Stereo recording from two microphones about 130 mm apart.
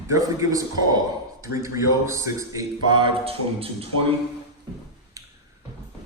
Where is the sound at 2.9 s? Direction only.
40° right (ahead or behind).